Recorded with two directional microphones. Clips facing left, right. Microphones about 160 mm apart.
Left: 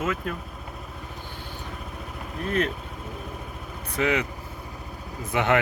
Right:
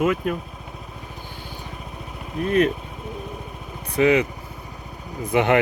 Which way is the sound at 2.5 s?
15° right (ahead or behind).